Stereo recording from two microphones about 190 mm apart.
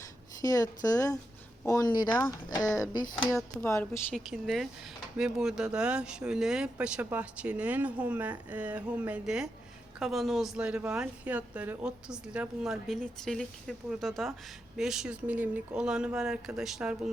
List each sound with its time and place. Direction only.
0.4 s a woman's voice: 20° left (ahead or behind)
4.1 s speech: centre (ahead or behind)